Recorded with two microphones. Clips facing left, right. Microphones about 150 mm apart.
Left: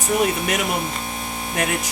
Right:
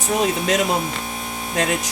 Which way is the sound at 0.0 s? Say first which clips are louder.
Even; 90° right.